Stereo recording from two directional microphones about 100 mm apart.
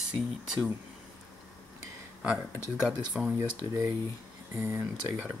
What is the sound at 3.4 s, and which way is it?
Speech, 25° right (ahead or behind).